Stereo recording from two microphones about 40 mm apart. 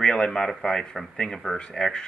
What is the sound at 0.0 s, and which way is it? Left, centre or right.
Speech, centre.